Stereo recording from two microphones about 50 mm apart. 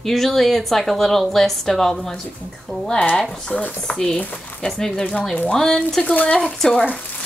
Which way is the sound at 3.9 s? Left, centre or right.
Left.